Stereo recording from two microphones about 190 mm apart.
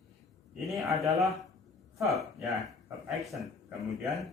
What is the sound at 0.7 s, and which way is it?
A man's voice, centre (ahead or behind).